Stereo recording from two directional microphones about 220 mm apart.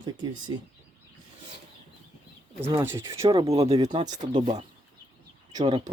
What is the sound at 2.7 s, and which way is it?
Speech, 15° right (ahead or behind).